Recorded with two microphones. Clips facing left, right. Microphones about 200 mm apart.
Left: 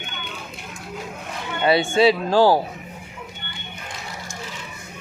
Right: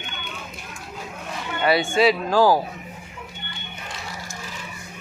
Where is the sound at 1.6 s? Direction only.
25° left (ahead or behind).